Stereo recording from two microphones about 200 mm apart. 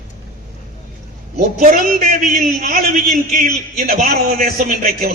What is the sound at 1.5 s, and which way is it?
A man's voice, 40° right (ahead or behind).